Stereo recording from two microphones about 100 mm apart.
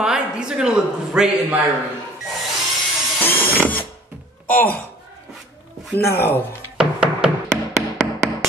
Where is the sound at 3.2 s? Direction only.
20° left (ahead or behind).